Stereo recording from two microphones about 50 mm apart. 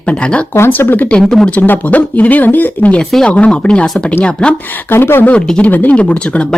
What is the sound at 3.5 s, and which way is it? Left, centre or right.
Speech, left.